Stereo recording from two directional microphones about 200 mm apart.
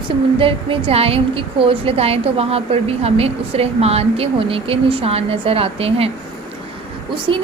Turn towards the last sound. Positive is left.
turn(degrees=-25)  # may be behind; listen again after turning